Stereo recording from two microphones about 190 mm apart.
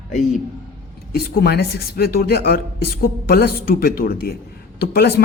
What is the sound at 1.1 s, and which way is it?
Speech, 55° left (ahead or behind).